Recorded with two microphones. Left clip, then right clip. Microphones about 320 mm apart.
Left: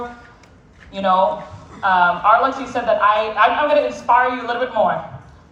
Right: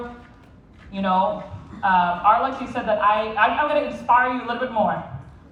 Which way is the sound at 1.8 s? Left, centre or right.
Left.